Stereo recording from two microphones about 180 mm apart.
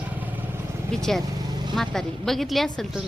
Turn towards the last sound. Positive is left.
turn(degrees=0)  # may be behind; listen again after turning